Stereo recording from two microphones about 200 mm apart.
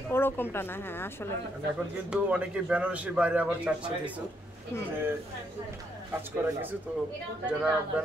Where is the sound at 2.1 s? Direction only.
5° right (ahead or behind).